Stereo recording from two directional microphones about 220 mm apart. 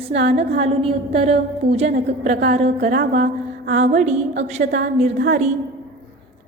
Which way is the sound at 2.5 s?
30° right (ahead or behind).